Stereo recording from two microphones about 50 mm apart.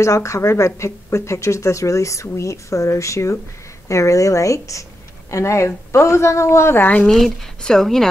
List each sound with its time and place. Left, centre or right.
0.0 s speech: left
5.3 s a woman's voice: left
6.7 s speech: left
7.1 s speech: centre